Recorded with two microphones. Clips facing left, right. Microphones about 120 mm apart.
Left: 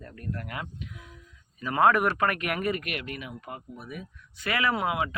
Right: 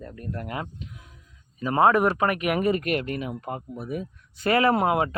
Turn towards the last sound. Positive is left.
turn(degrees=-40)  # may be behind; listen again after turning